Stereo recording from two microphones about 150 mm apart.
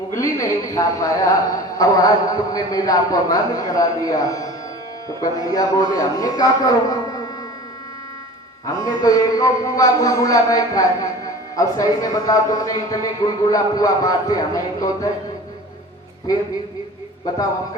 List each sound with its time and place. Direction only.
0.1 s a man's voice: 20° left (ahead or behind)
8.6 s a man's voice: 25° left (ahead or behind)